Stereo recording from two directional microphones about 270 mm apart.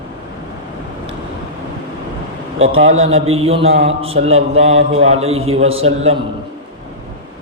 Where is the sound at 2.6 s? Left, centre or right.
Right.